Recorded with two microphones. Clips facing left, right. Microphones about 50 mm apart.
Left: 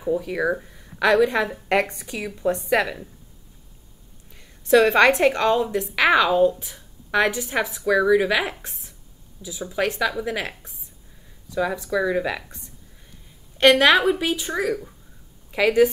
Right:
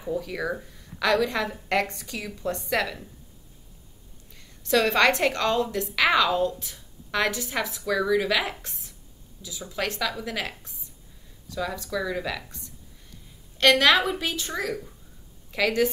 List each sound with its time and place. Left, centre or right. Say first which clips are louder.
0.0 s a woman's voice: left 6 dB; centre
4.4 s a woman's voice: left 7 dB; centre